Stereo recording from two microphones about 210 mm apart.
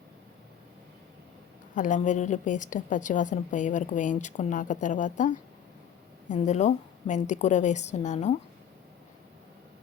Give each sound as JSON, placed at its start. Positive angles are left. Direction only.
{"t": 1.7, "sound": "a woman's voice", "side_deg": 35}